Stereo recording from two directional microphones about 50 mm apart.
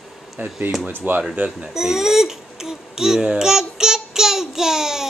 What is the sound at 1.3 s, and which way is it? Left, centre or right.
Speech, right.